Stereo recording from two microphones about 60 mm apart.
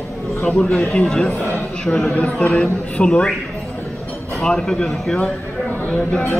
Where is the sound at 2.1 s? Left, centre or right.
Centre.